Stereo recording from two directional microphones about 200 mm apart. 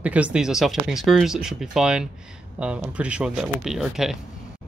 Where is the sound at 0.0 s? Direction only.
5° right (ahead or behind).